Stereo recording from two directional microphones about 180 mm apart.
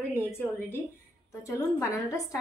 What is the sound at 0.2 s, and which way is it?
A woman's voice, 10° left (ahead or behind).